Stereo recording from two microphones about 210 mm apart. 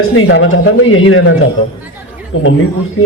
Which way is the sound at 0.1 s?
70° left (ahead or behind).